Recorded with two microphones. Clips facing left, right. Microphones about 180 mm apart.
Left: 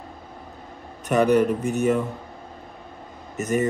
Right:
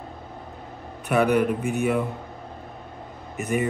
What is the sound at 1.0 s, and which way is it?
Speech, 10° right (ahead or behind).